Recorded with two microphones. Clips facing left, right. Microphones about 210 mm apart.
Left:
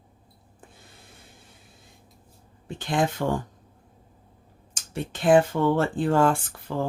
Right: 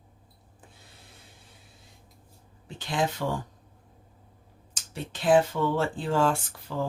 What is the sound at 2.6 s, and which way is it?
Speech, 50° left (ahead or behind).